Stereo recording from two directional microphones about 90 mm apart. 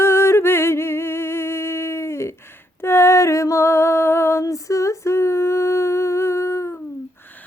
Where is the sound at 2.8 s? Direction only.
30° left (ahead or behind).